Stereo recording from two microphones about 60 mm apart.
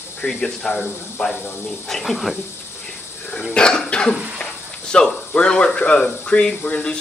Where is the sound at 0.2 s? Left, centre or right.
Centre.